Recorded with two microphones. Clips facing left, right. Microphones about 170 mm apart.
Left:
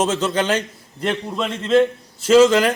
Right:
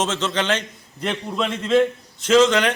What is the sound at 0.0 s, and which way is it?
A man's voice, 10° left (ahead or behind).